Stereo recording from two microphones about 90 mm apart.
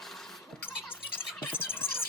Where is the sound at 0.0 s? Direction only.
5° left (ahead or behind).